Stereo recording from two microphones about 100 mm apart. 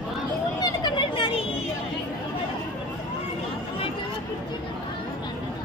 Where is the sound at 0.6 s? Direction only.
50° left (ahead or behind).